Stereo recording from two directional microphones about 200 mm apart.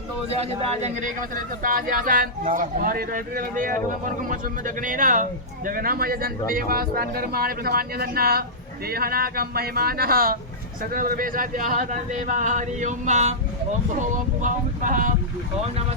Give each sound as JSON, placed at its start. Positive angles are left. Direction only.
{"t": 0.3, "sound": "speech", "side_deg": -30}